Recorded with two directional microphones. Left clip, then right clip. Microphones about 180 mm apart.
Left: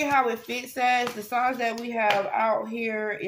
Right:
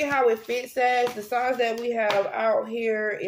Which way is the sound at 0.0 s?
15° right (ahead or behind).